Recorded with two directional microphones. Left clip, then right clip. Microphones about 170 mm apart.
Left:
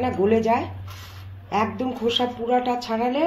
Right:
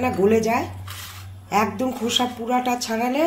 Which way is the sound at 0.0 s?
70° right (ahead or behind).